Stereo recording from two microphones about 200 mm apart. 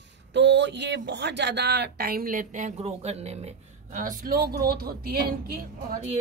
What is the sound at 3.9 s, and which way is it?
Speech, 45° right (ahead or behind).